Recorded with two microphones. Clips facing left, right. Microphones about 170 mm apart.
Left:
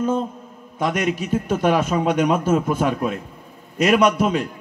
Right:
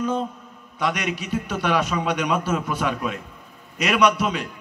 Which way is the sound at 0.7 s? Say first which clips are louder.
Left 4 dB; 45° left (ahead or behind).